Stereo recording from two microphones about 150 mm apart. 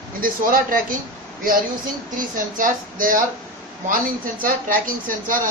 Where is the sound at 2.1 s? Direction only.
65° right (ahead or behind).